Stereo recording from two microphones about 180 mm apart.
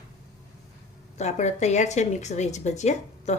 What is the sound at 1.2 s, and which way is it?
A woman's voice, 40° left (ahead or behind).